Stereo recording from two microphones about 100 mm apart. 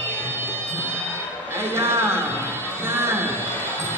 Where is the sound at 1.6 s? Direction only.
25° right (ahead or behind).